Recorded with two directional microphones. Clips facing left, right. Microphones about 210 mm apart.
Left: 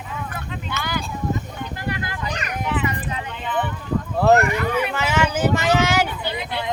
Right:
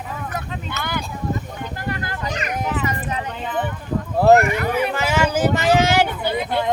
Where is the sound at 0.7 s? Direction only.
45° right (ahead or behind).